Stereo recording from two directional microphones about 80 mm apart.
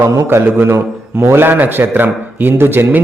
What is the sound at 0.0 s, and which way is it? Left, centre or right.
A man's voice, right.